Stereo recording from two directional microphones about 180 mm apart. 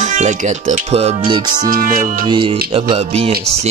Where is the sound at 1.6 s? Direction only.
50° right (ahead or behind).